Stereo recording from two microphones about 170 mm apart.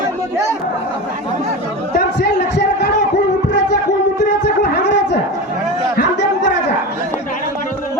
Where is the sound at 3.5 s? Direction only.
85° left.